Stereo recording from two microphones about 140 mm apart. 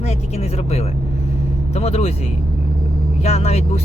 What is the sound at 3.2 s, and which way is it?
Speech, 50° left (ahead or behind).